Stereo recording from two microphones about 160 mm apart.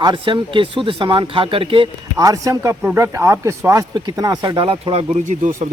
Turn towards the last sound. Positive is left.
turn(degrees=-50)  # may be behind; listen again after turning